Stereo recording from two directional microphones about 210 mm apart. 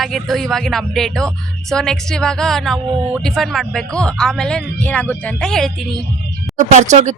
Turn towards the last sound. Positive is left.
turn(degrees=-35)  # may be behind; listen again after turning